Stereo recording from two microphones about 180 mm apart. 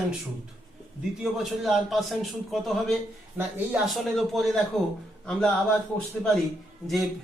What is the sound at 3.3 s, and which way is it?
Speech, 10° right (ahead or behind).